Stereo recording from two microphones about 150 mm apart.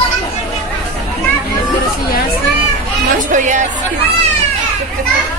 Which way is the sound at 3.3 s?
55° right (ahead or behind).